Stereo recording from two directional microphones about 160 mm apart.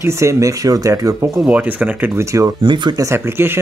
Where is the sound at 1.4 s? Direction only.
10° right (ahead or behind).